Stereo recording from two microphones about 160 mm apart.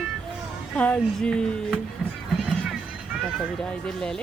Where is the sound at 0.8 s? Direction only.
5° left (ahead or behind).